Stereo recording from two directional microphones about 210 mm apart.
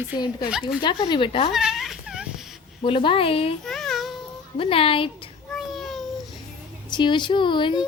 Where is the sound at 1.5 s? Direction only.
Centre (ahead or behind).